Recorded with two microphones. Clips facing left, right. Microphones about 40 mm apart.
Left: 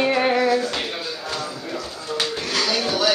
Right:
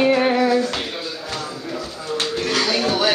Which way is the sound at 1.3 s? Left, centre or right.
Centre.